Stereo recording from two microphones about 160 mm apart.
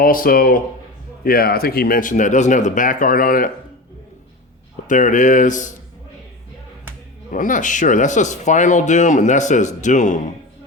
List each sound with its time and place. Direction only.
0.0 s speech: 60° left (ahead or behind)
4.9 s speech: 50° left (ahead or behind)
7.3 s speech: 55° left (ahead or behind)